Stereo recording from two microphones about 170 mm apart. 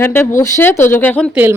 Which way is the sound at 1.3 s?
10° right (ahead or behind).